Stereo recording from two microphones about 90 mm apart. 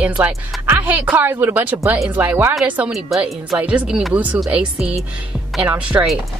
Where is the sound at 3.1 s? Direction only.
Centre (ahead or behind).